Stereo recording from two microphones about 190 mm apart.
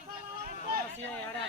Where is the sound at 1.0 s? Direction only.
5° left (ahead or behind).